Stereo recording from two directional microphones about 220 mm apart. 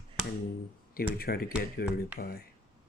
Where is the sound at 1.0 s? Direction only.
45° left (ahead or behind).